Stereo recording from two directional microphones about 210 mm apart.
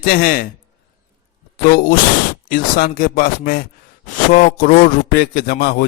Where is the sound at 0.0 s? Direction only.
45° left (ahead or behind).